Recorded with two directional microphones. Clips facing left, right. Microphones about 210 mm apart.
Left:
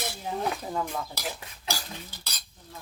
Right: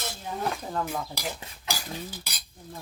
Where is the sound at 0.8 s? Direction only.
5° right (ahead or behind).